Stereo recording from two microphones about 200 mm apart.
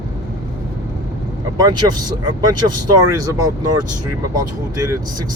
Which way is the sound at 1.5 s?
20° right (ahead or behind).